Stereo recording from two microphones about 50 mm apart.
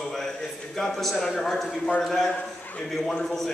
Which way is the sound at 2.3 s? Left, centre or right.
Left.